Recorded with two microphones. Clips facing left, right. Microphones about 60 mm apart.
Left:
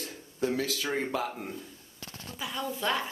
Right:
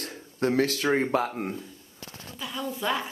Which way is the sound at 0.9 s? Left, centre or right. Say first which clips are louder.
Right 6 dB; right.